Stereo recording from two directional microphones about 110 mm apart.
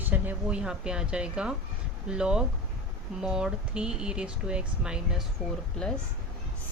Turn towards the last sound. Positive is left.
turn(degrees=5)  # may be behind; listen again after turning